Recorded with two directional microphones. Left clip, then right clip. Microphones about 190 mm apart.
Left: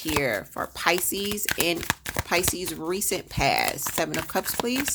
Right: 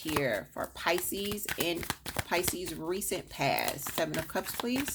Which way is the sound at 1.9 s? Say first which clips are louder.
Left 7 dB; 30° left (ahead or behind).